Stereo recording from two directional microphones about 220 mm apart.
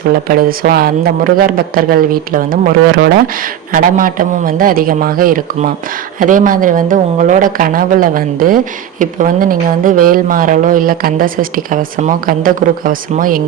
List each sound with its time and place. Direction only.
0.1 s speech: 40° right (ahead or behind)